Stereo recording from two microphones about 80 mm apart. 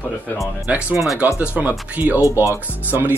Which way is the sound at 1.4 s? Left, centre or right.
Centre.